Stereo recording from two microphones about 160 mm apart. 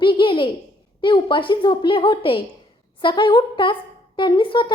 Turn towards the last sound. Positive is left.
turn(degrees=30)  # may be behind; listen again after turning